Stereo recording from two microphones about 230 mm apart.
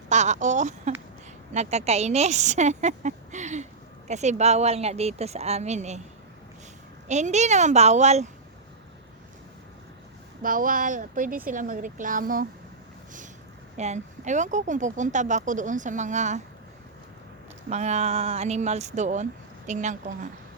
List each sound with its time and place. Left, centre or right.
0.1 s a sound: right
1.5 s speech: right
7.1 s speech: right
10.4 s speech: right
13.7 s speech: right
17.7 s speech: right